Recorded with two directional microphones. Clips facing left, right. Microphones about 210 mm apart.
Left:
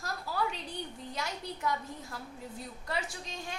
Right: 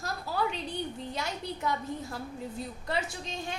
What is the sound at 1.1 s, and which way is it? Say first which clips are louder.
A woman's voice: right 3 dB; 25° right (ahead or behind).